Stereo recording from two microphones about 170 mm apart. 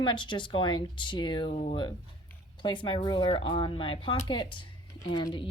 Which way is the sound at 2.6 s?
30° left (ahead or behind).